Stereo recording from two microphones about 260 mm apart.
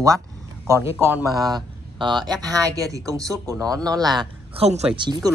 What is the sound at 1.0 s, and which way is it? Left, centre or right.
Speech, centre.